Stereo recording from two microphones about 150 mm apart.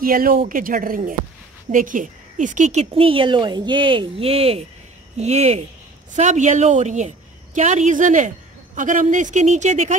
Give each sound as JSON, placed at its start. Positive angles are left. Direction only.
{"t": 0.0, "sound": "a woman's voice", "side_deg": -70}